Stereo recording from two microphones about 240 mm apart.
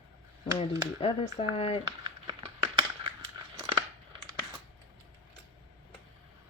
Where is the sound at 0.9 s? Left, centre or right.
Left.